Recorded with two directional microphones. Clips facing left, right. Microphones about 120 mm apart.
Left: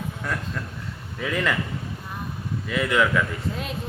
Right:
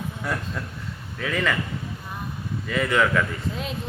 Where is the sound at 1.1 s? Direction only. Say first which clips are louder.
Even; centre (ahead or behind).